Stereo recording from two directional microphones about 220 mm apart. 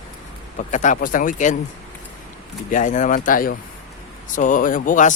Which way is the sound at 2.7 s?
35° left (ahead or behind).